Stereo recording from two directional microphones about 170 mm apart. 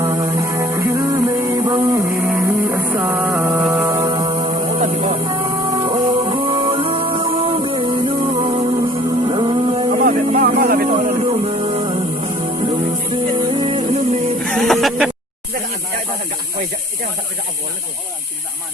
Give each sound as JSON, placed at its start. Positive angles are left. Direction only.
{"t": 0.1, "sound": "music", "side_deg": -20}
{"t": 4.5, "sound": "a sound", "side_deg": -40}
{"t": 5.2, "sound": "music", "side_deg": -25}
{"t": 9.9, "sound": "music", "side_deg": -55}
{"t": 14.4, "sound": "music", "side_deg": 0}